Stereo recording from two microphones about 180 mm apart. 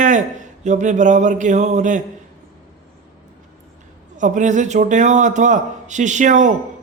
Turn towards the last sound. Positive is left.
turn(degrees=-45)  # may be behind; listen again after turning